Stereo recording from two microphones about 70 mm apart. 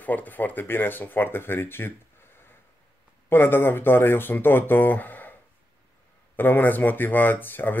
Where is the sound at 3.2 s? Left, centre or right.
Left.